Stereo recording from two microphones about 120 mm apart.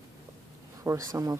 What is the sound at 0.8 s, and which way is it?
Speech, 25° right (ahead or behind).